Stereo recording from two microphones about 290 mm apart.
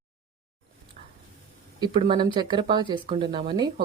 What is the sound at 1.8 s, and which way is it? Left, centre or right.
Speech, centre.